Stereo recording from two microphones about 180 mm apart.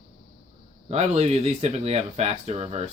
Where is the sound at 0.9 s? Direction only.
35° right (ahead or behind).